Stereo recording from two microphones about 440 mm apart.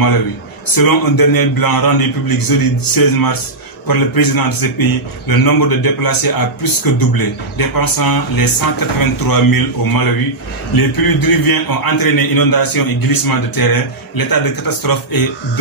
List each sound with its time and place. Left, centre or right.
0.7 s a man's voice: left